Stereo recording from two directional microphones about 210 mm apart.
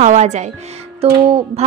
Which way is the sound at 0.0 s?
35° right (ahead or behind).